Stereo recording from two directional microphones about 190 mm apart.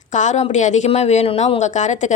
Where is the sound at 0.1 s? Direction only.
40° left (ahead or behind).